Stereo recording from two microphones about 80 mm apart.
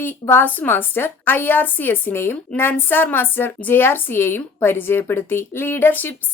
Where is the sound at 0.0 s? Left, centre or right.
Left.